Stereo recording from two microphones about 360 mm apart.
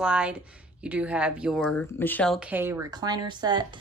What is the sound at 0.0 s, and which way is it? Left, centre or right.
Speech, centre.